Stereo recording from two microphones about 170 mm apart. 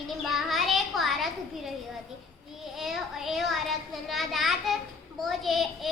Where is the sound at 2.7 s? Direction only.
Centre (ahead or behind).